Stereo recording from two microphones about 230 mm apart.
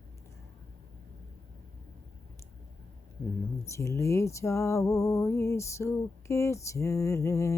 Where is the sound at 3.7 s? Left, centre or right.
Centre.